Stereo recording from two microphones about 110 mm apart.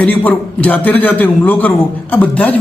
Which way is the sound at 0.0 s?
15° left (ahead or behind).